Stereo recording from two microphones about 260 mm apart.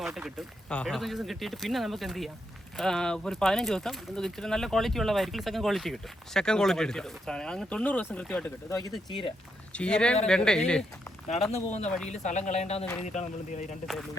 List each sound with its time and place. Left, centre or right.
0.0 s speech: centre
11.5 s speech: left